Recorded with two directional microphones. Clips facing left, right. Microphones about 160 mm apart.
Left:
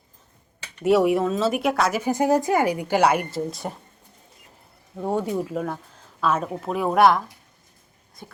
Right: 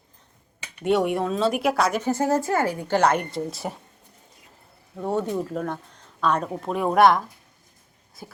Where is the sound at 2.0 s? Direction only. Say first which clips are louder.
Left 2 dB; 15° left (ahead or behind).